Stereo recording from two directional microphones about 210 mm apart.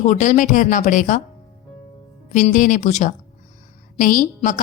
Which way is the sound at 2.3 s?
35° left (ahead or behind).